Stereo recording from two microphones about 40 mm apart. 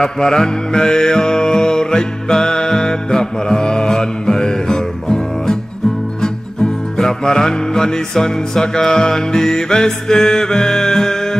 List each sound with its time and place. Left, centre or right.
0.0 s music: centre